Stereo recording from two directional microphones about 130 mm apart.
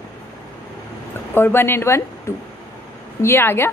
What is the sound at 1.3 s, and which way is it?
A woman's voice, 15° left (ahead or behind).